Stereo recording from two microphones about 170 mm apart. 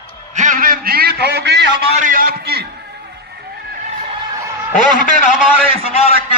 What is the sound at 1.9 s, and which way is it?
Speech, 50° right (ahead or behind).